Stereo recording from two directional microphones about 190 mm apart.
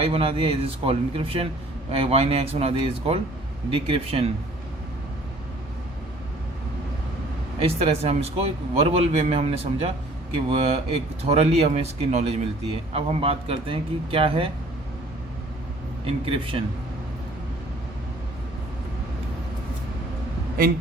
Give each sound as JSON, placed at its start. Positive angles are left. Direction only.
{"t": 0.0, "sound": "a man's voice", "side_deg": -30}
{"t": 7.6, "sound": "a man's voice", "side_deg": -30}
{"t": 16.0, "sound": "speech", "side_deg": -30}